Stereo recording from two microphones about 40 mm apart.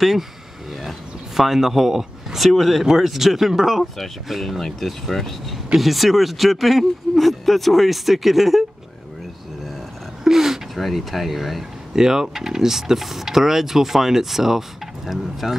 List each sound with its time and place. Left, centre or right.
1.3 s speech: centre
10.2 s speech: centre